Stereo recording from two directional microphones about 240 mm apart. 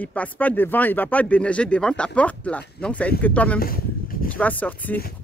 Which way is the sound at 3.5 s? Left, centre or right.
Left.